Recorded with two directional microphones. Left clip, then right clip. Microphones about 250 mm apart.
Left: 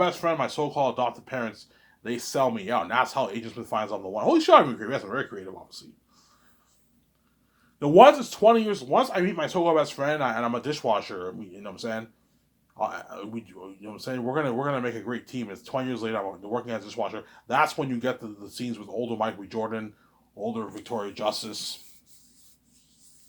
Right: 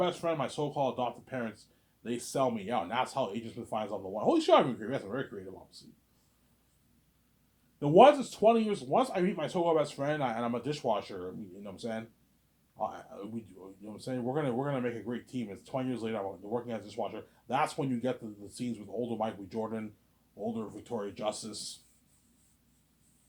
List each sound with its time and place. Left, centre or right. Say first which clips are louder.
0.0 s speech: left 7 dB; centre
7.8 s speech: left 6 dB; centre